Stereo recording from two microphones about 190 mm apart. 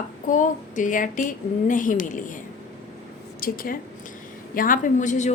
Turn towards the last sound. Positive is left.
turn(degrees=40)  # may be behind; listen again after turning